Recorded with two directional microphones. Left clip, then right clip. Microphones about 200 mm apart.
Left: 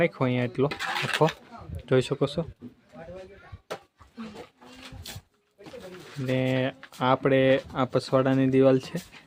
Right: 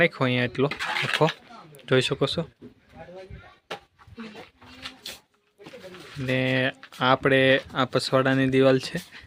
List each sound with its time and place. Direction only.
0.0 s speech: centre (ahead or behind)
0.7 s speech: 30° left (ahead or behind)
1.9 s speech: centre (ahead or behind)
6.2 s speech: centre (ahead or behind)